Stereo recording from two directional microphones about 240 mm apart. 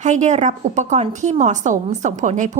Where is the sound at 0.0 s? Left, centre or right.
Right.